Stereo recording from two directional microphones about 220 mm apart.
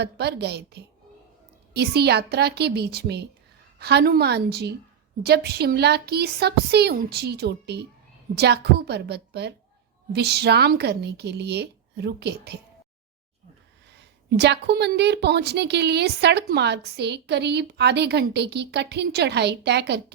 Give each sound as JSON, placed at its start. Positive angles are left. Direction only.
{"t": 0.0, "sound": "a woman's voice", "side_deg": -50}
{"t": 14.3, "sound": "a woman's voice", "side_deg": -50}